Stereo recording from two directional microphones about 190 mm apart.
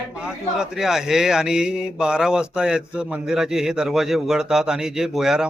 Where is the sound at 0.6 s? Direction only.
5° right (ahead or behind).